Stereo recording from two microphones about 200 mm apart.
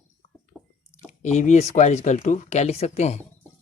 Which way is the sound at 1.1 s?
35° left (ahead or behind).